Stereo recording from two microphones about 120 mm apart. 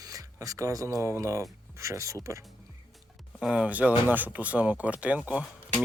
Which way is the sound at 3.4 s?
10° right (ahead or behind).